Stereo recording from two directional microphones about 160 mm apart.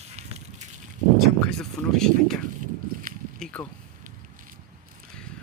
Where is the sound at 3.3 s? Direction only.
5° left (ahead or behind).